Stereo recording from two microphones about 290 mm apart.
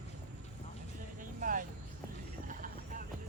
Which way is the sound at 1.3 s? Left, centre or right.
Right.